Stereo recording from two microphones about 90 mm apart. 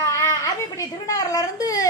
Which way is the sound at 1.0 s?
40° left (ahead or behind).